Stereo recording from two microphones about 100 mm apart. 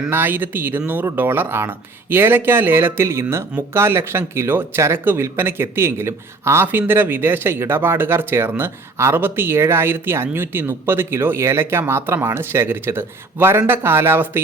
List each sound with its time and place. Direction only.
0.1 s speech: 20° right (ahead or behind)